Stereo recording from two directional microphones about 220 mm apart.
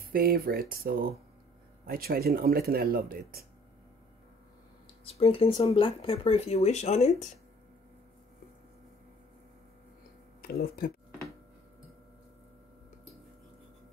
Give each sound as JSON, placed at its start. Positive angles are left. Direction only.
{"t": 0.0, "sound": "speech", "side_deg": -45}
{"t": 5.0, "sound": "speech", "side_deg": 25}